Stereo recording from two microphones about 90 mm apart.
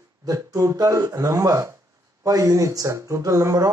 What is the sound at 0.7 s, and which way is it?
Speech, 40° right (ahead or behind).